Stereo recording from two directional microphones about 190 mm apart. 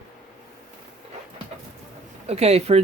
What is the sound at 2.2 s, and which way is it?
Speech, 35° right (ahead or behind).